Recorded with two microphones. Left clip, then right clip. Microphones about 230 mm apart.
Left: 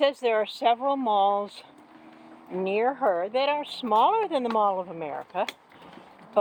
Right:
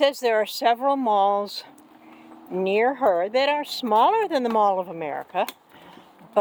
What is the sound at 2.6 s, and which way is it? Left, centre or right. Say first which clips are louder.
Speech: right 4 dB; right.